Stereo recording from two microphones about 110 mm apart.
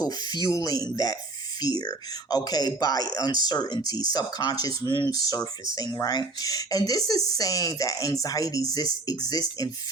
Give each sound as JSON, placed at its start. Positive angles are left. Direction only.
{"t": 0.0, "sound": "speech", "side_deg": 35}